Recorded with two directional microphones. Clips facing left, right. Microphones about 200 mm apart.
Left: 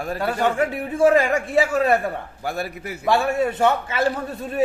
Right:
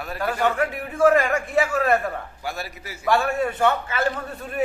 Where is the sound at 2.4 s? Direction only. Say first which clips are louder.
Left 5 dB; 55° left (ahead or behind).